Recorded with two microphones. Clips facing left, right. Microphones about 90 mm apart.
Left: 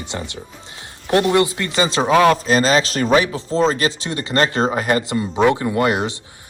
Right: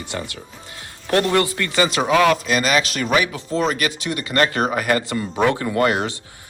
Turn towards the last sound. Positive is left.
turn(degrees=20)  # may be behind; listen again after turning